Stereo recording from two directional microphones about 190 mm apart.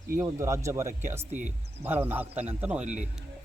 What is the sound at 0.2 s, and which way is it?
Speech, 15° right (ahead or behind).